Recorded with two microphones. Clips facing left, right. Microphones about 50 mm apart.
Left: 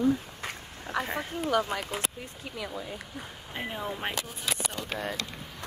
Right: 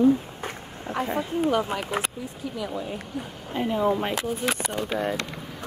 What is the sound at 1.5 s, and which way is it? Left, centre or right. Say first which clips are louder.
Speech: left 1 dB; right.